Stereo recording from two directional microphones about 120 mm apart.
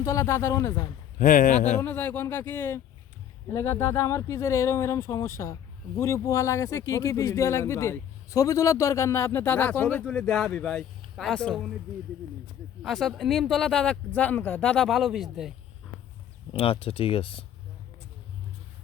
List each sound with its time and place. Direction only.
0.0 s speech: 25° left (ahead or behind)
1.2 s speech: 90° left
1.8 s speech: 15° left (ahead or behind)
12.8 s speech: centre (ahead or behind)
16.5 s speech: 50° left (ahead or behind)